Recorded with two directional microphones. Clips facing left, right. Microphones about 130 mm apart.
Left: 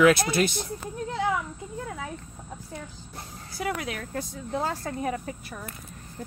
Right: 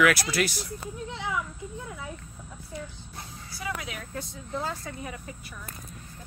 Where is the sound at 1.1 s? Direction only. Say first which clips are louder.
Left 9 dB; 45° left (ahead or behind).